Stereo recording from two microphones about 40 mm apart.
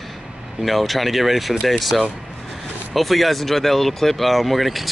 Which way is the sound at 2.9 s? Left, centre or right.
Centre.